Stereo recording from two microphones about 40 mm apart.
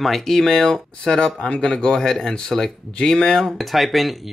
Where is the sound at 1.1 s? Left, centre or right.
Left.